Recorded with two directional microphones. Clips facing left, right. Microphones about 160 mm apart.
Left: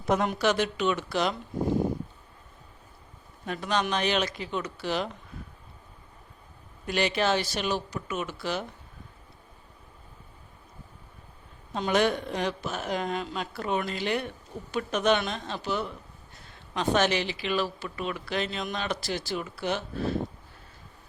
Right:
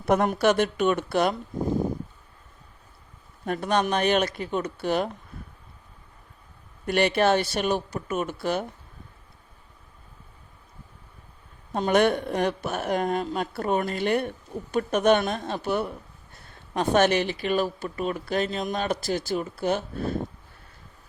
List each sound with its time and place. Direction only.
0.1 s speech: 55° right (ahead or behind)
3.4 s speech: 50° right (ahead or behind)
6.8 s speech: 55° right (ahead or behind)
11.7 s speech: 50° right (ahead or behind)